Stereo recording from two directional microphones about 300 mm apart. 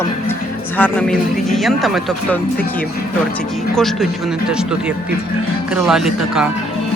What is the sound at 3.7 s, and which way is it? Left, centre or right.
Speech, centre.